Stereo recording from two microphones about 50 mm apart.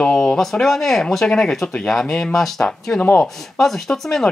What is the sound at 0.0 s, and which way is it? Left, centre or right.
Speech, centre.